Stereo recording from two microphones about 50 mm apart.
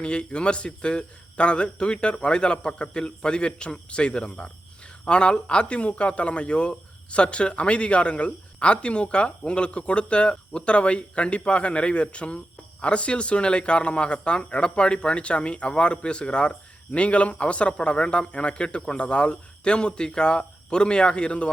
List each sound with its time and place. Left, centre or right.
0.0 s speech: centre